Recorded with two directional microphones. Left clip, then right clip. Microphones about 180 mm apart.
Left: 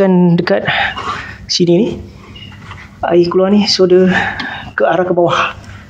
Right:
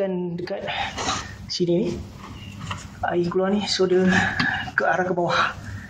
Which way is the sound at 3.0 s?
50° left (ahead or behind).